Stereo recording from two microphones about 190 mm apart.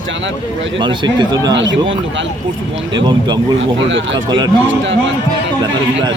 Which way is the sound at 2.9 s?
25° right (ahead or behind).